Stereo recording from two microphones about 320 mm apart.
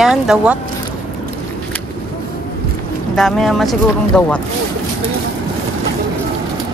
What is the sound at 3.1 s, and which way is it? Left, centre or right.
Speech, centre.